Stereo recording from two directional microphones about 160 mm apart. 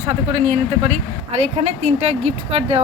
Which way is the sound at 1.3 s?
45° right (ahead or behind).